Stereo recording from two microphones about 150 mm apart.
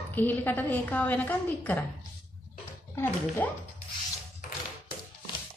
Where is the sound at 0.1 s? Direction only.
10° left (ahead or behind).